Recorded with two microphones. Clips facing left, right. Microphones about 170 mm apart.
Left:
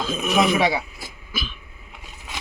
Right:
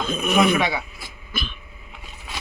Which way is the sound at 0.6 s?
35° left (ahead or behind).